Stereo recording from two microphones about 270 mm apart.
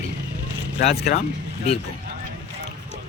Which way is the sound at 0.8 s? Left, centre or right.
Left.